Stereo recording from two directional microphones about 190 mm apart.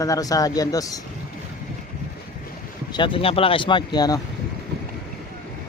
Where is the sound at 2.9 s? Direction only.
25° left (ahead or behind).